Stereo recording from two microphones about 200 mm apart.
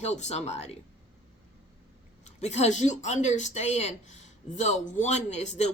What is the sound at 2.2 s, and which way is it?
Speech, 35° left (ahead or behind).